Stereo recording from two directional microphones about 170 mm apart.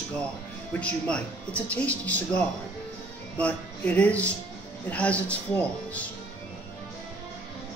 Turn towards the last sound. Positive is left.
turn(degrees=10)  # may be behind; listen again after turning